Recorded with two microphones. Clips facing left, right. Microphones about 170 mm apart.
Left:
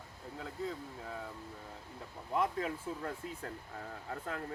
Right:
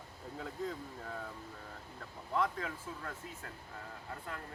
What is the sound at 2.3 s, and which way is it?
Speech, 25° left (ahead or behind).